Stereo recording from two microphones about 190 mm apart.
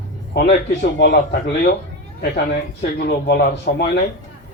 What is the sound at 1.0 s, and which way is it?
Speech, 55° left (ahead or behind).